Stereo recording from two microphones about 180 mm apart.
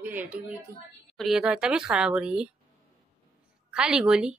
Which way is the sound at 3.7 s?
5° right (ahead or behind).